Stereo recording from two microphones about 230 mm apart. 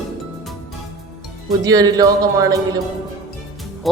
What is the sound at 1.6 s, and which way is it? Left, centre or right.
Speech, centre.